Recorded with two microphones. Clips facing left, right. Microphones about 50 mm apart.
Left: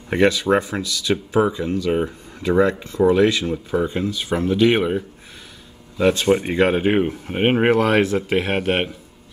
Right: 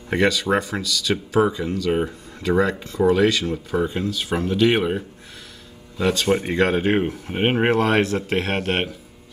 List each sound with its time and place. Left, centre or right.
0.1 s speech: centre
1.4 s speech: centre
3.5 s speech: centre
5.9 s speech: centre